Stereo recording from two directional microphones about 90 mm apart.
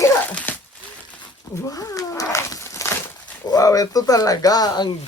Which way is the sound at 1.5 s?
40° left (ahead or behind).